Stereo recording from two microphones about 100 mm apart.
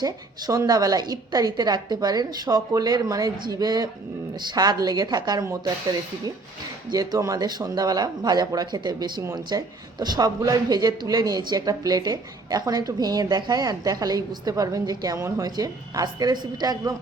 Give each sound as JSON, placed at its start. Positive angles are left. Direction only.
{"t": 0.0, "sound": "speech", "side_deg": -40}